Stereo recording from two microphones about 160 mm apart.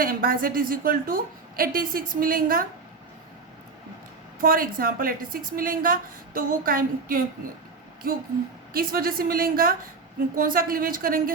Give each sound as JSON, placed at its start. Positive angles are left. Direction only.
{"t": 0.0, "sound": "a woman's voice", "side_deg": -65}
{"t": 4.4, "sound": "a woman's voice", "side_deg": -60}
{"t": 8.7, "sound": "a woman's voice", "side_deg": -65}